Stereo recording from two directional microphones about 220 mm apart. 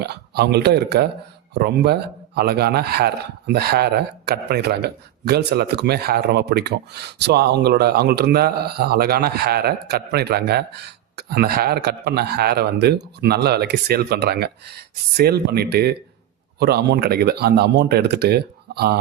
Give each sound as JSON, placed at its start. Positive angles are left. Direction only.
{"t": 0.0, "sound": "a man's voice", "side_deg": -50}